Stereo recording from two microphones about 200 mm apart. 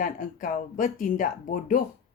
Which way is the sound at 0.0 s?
40° left (ahead or behind).